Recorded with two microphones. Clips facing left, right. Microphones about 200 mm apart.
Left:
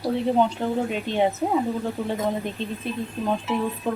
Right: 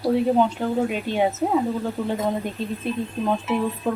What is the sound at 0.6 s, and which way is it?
Speech, 5° right (ahead or behind).